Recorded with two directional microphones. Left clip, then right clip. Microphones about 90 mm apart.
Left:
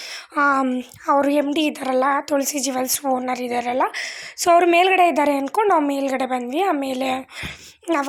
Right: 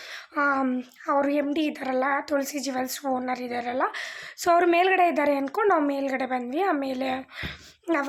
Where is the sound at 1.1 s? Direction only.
35° left (ahead or behind).